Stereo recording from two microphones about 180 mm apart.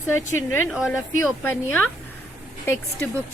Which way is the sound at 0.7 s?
5° right (ahead or behind).